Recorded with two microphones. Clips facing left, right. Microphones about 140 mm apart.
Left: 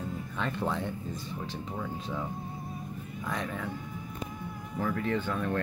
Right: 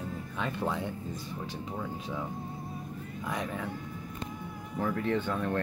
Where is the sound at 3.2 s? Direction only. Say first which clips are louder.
Even; 15° right (ahead or behind).